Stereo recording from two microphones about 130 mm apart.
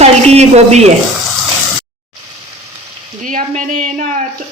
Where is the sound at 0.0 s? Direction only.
55° right (ahead or behind).